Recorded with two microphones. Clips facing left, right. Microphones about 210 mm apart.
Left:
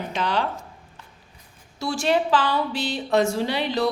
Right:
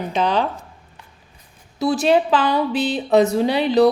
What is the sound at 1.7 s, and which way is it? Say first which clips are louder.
Speech: right 6 dB; 20° right (ahead or behind).